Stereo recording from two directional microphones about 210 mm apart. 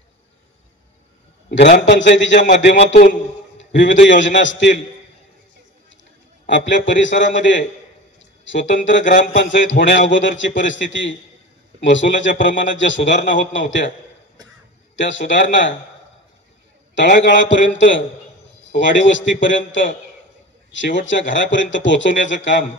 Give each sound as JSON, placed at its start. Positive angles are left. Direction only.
{"t": 1.9, "sound": "a man's voice", "side_deg": 60}
{"t": 2.7, "sound": "a man's voice", "side_deg": 35}
{"t": 3.5, "sound": "a man's voice", "side_deg": 60}
{"t": 6.5, "sound": "a man's voice", "side_deg": 60}
{"t": 15.0, "sound": "a man's voice", "side_deg": 60}
{"t": 16.9, "sound": "a man's voice", "side_deg": 55}